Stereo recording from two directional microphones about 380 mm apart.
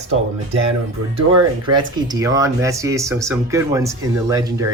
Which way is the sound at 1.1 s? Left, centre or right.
Centre.